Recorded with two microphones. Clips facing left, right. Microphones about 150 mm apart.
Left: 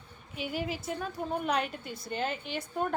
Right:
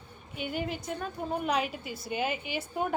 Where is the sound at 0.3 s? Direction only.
Centre (ahead or behind).